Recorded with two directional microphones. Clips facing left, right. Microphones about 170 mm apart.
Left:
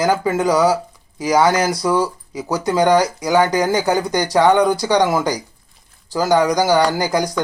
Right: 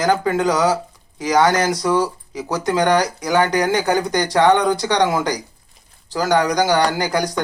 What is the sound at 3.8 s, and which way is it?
Speech, 15° right (ahead or behind).